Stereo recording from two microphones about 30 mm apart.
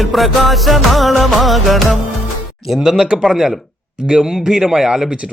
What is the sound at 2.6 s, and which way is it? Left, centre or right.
A man's voice, centre.